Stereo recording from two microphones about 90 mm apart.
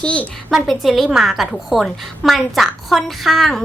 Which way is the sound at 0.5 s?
Centre (ahead or behind).